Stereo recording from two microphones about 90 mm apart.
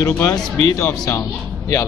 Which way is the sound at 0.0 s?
40° left (ahead or behind).